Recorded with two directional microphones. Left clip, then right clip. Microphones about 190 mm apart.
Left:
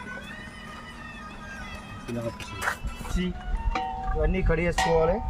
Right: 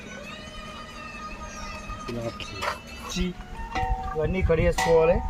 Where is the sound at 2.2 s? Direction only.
35° left (ahead or behind).